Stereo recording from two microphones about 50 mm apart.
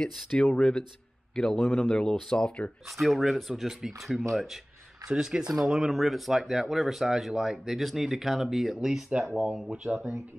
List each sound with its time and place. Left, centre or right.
0.6 s a man's voice: centre
1.6 s speech: left
1.9 s speech: centre
3.0 s speech: centre
5.0 s speech: centre